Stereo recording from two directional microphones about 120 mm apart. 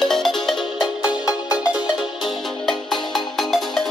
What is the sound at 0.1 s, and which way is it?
Music, 5° left (ahead or behind).